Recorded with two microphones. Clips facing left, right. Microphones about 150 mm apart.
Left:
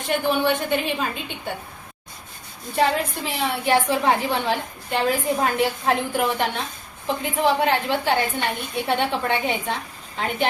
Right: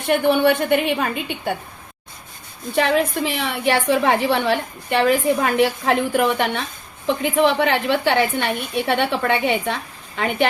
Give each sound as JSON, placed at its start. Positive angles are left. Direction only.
{"t": 0.1, "sound": "a woman's voice", "side_deg": -65}
{"t": 2.7, "sound": "a woman's voice", "side_deg": -75}